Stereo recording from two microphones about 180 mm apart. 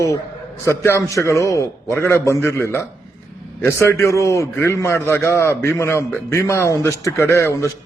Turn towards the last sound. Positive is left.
turn(degrees=15)  # may be behind; listen again after turning